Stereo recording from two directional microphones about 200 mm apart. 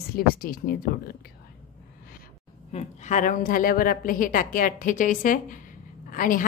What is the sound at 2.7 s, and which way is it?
A woman's voice, 35° left (ahead or behind).